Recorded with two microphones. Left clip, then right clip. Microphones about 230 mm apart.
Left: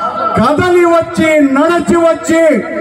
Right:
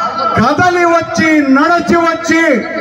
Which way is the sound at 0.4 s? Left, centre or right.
Left.